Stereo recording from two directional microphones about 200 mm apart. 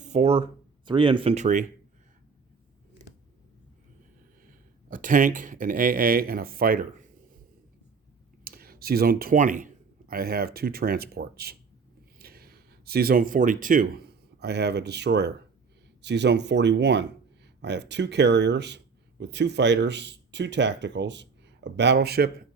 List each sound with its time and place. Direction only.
0.0 s a sound: 35° right (ahead or behind)
0.9 s speech: 25° right (ahead or behind)
4.9 s speech: 40° right (ahead or behind)
8.4 s speech: 50° right (ahead or behind)